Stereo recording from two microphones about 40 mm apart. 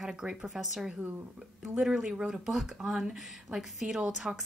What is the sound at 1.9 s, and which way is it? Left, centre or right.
A woman's voice, right.